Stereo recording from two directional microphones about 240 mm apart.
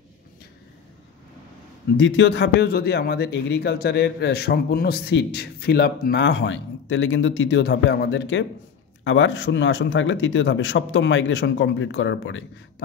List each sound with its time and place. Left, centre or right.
2.0 s a man's voice: left